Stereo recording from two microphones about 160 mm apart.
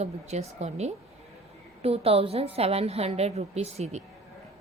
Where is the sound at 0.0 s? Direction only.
45° right (ahead or behind).